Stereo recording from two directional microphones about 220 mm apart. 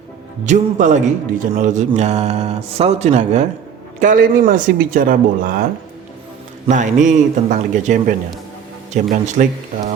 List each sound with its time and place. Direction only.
0.4 s speech: 35° right (ahead or behind)
6.7 s speech: 35° right (ahead or behind)